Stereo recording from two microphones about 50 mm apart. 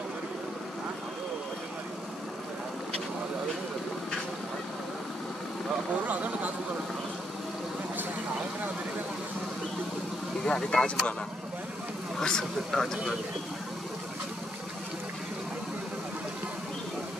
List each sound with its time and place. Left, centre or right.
6.0 s speech: right
10.4 s speech: centre
12.2 s speech: centre